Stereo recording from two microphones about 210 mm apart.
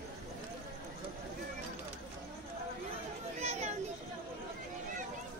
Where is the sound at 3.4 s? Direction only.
30° right (ahead or behind).